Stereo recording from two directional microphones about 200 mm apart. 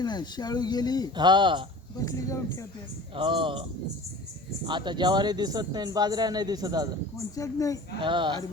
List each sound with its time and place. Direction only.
0.0 s speech: 20° left (ahead or behind)
1.1 s speech: 20° right (ahead or behind)
2.0 s speech: 15° left (ahead or behind)
3.2 s speech: 25° right (ahead or behind)
7.3 s speech: 15° left (ahead or behind)
8.0 s speech: 25° right (ahead or behind)